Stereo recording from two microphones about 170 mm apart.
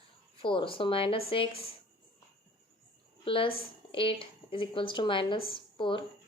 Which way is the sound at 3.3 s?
30° left (ahead or behind).